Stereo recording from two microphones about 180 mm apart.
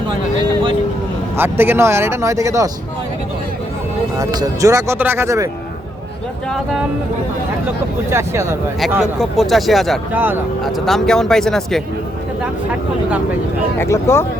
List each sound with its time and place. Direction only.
1.4 s speech: 10° right (ahead or behind)
4.2 s speech: 20° right (ahead or behind)
8.1 s speech: 15° right (ahead or behind)
8.9 s speech: 5° right (ahead or behind)
10.1 s speech: 10° right (ahead or behind)
10.6 s speech: centre (ahead or behind)
13.7 s speech: 15° left (ahead or behind)